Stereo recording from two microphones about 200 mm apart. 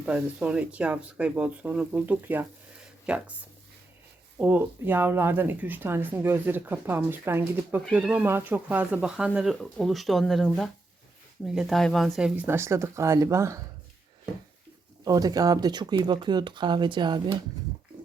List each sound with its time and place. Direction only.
0.0 s speech: 5° right (ahead or behind)
4.4 s speech: 10° right (ahead or behind)
15.0 s speech: 20° right (ahead or behind)